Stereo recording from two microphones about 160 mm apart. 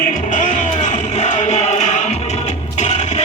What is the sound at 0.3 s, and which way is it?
Music, 50° left (ahead or behind).